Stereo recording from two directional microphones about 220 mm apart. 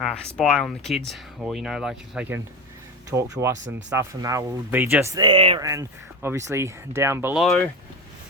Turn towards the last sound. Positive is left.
turn(degrees=0)  # may be behind; listen again after turning